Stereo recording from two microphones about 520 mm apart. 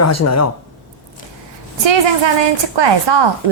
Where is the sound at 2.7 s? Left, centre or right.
Right.